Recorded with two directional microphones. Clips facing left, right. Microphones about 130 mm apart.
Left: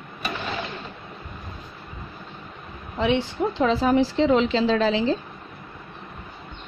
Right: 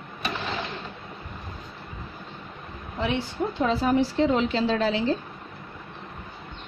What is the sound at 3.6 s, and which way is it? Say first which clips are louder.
A woman's voice: left 3 dB; 90° left.